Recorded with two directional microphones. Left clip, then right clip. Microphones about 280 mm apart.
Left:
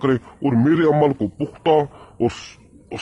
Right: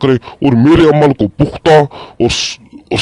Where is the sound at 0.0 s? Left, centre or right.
Right.